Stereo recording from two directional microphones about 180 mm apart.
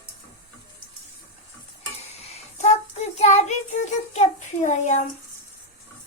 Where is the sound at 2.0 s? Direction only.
35° left (ahead or behind).